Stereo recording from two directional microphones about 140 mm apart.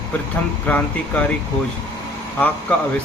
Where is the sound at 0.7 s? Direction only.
10° left (ahead or behind).